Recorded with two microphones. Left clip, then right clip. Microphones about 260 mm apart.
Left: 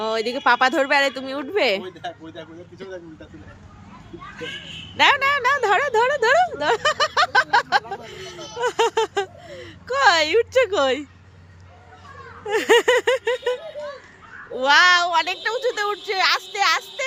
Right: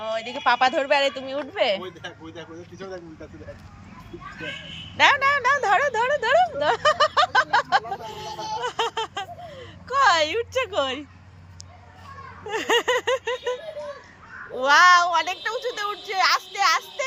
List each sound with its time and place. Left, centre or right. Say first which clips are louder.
0.0 s speech: left 4 dB; left
4.9 s speech: left 1 dB; centre
12.5 s speech: left 5 dB; centre